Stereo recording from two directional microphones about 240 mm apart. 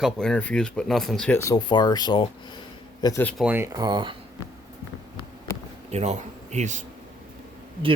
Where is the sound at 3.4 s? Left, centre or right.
Centre.